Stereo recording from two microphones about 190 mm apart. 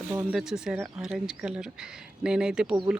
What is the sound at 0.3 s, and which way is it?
Speech, 5° right (ahead or behind).